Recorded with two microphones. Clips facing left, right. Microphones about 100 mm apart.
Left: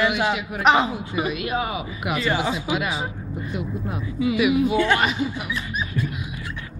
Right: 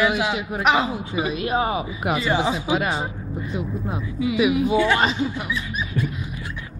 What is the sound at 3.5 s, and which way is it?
Speech, 20° right (ahead or behind).